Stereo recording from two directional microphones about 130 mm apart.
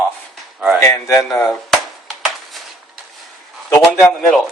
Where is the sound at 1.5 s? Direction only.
Centre (ahead or behind).